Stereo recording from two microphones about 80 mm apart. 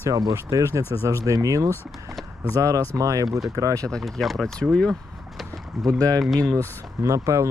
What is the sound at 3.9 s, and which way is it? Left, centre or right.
Speech, centre.